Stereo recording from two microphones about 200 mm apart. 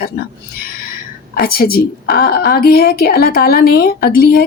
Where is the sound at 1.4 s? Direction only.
50° left (ahead or behind).